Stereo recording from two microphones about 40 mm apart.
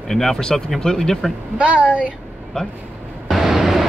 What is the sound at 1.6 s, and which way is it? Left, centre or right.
Speech, right.